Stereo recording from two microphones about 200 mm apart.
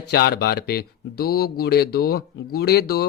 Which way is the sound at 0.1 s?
55° left (ahead or behind).